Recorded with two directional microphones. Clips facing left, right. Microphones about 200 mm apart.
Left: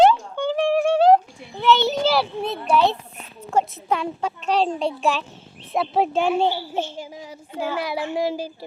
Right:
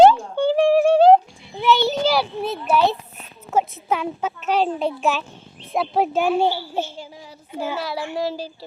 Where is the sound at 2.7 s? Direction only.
5° right (ahead or behind).